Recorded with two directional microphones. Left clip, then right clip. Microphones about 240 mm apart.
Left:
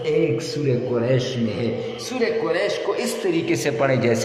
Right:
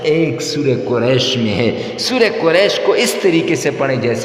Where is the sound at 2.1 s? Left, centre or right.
Right.